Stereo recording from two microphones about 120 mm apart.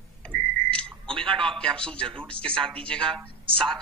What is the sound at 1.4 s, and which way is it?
A man's voice, 5° left (ahead or behind).